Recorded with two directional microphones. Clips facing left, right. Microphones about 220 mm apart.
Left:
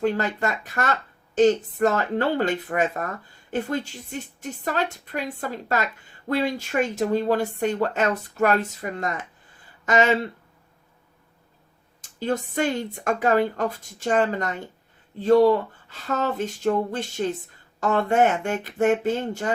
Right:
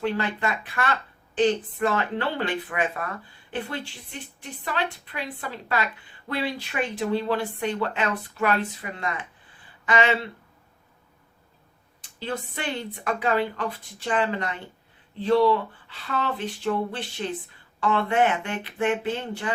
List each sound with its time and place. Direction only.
0.0 s speech: 45° left (ahead or behind)
12.0 s speech: 45° left (ahead or behind)